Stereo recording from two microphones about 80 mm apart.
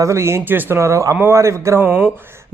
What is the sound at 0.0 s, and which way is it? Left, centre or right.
Speech, right.